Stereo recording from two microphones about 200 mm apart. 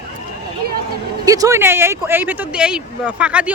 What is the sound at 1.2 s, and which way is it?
Speech, 15° right (ahead or behind).